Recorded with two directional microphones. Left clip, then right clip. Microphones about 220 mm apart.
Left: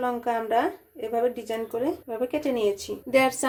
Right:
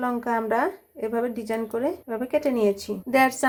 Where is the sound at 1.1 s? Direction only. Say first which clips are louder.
Left 2 dB; 20° right (ahead or behind).